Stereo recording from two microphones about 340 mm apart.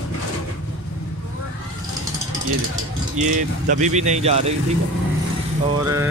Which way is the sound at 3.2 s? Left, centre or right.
Right.